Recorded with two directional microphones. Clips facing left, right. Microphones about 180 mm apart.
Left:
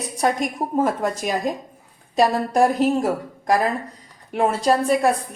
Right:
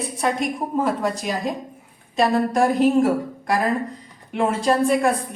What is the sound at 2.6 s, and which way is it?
A woman's voice, 40° left (ahead or behind).